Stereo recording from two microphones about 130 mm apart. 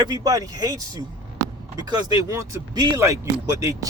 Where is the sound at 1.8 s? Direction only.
30° right (ahead or behind).